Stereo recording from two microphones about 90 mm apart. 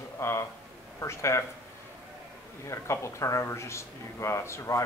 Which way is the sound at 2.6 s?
30° left (ahead or behind).